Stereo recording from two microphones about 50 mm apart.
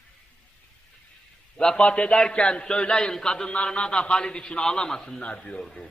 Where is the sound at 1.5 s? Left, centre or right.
Centre.